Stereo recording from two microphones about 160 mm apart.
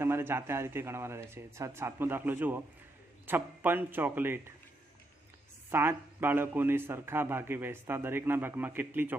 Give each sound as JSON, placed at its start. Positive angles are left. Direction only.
{"t": 0.0, "sound": "a man's voice", "side_deg": -15}
{"t": 5.7, "sound": "a man's voice", "side_deg": -15}